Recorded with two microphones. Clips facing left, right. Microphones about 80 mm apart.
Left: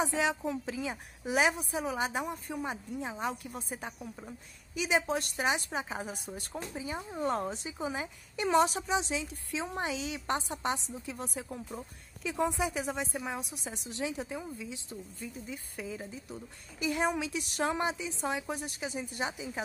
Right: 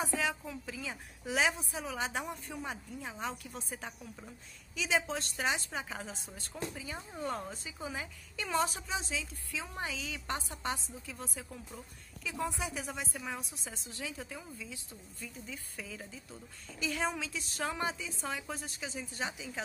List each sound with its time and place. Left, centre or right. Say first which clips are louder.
0.0 s speech: left 4 dB; left
1.2 s a woman's voice: left 3 dB; centre
3.0 s a woman's voice: left 5 dB; centre
11.4 s speech: left 6 dB; left
13.1 s a woman's voice: left 4 dB; centre